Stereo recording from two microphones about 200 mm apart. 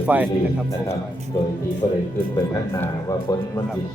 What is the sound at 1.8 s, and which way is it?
Speech, 20° left (ahead or behind).